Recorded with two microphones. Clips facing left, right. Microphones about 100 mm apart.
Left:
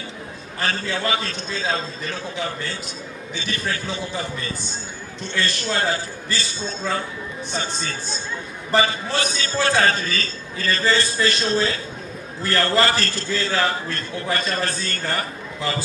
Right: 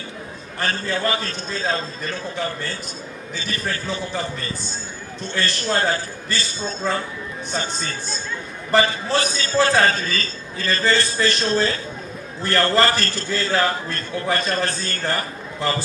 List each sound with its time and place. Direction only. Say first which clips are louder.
0.6 s a man's voice: right 1 dB; 40° right (ahead or behind)
5.3 s a man's voice: right 2 dB; 40° right (ahead or behind)
9.1 s a man's voice: right 6 dB; 40° right (ahead or behind)